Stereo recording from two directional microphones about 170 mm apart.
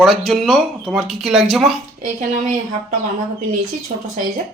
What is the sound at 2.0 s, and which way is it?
Speech, 50° right (ahead or behind).